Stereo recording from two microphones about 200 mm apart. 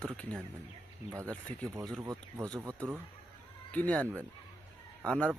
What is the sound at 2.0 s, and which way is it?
Speech, 20° right (ahead or behind).